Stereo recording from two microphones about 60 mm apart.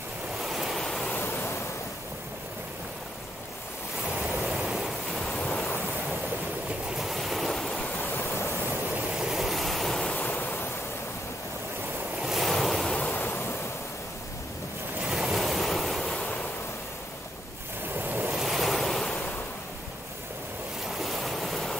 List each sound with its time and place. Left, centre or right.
0.4 s waves: centre
0.7 s waves: centre
1.1 s waves: left
4.4 s waves: centre
7.0 s waves: centre
9.2 s waves: centre
10.0 s waves: left
10.3 s waves: left
12.2 s waves: centre
13.2 s waves: left
15.0 s waves: centre
17.9 s waves: right
18.3 s waves: centre
21.0 s waves: centre